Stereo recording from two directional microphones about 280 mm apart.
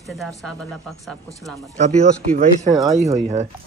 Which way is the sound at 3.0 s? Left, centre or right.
Right.